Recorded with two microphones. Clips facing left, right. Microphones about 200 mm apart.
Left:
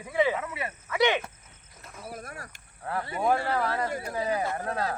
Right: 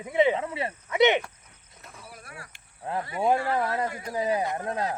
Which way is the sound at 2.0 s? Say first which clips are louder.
Left 7 dB; 40° left (ahead or behind).